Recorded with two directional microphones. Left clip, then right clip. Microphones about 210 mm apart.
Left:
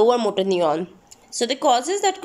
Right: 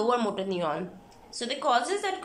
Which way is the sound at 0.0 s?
30° left (ahead or behind).